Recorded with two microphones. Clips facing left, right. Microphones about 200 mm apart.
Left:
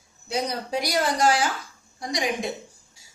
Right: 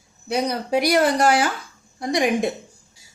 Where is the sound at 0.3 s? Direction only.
65° right (ahead or behind).